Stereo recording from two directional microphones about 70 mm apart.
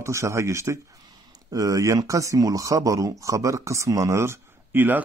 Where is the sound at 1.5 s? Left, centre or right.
Right.